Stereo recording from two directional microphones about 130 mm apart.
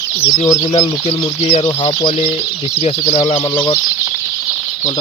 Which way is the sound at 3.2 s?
45° left (ahead or behind).